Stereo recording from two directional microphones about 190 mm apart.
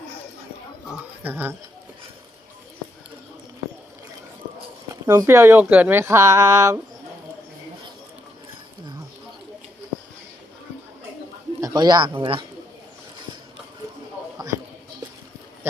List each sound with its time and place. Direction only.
1.2 s speech: 10° right (ahead or behind)
5.0 s speech: 15° right (ahead or behind)
11.6 s speech: 20° right (ahead or behind)